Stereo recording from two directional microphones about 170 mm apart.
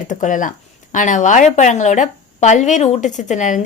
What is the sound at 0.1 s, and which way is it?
A woman's voice, 50° left (ahead or behind).